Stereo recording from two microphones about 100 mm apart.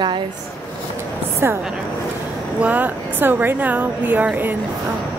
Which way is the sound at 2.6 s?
15° right (ahead or behind).